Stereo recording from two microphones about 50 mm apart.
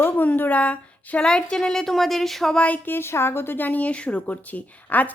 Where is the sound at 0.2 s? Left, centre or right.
Left; by 2.6 s centre.